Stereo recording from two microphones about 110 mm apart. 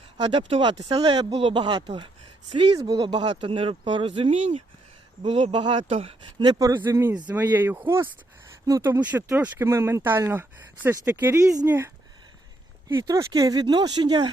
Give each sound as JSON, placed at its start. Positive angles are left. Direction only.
{"t": 0.2, "sound": "speech", "side_deg": -50}
{"t": 2.7, "sound": "speech", "side_deg": -35}
{"t": 3.0, "sound": "speech", "side_deg": -45}
{"t": 4.3, "sound": "speech", "side_deg": -90}
{"t": 5.2, "sound": "speech", "side_deg": -55}
{"t": 6.4, "sound": "speech", "side_deg": -35}
{"t": 6.7, "sound": "speech", "side_deg": -20}
{"t": 12.9, "sound": "speech", "side_deg": -30}